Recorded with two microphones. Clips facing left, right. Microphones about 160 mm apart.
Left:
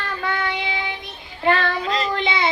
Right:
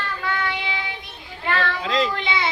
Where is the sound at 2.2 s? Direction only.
25° left (ahead or behind).